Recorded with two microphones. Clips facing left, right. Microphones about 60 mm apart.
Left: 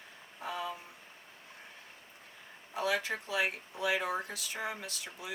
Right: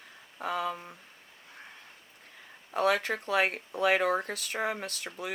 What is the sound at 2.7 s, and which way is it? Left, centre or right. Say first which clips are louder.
Speech: right 6 dB; right.